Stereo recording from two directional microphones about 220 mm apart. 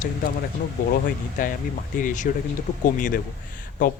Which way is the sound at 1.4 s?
35° left (ahead or behind).